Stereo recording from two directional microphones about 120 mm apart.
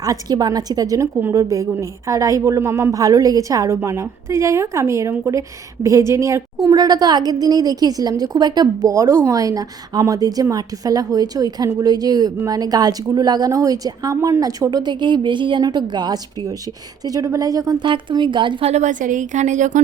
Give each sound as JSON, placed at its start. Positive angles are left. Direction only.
{"t": 0.0, "sound": "a woman's voice", "side_deg": -30}
{"t": 6.7, "sound": "a woman's voice", "side_deg": -35}
{"t": 18.6, "sound": "a woman's voice", "side_deg": -70}